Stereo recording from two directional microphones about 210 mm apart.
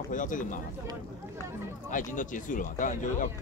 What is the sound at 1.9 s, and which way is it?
Speech, 40° left (ahead or behind).